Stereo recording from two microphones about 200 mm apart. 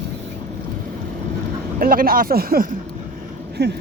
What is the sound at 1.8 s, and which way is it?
Speech, 45° right (ahead or behind).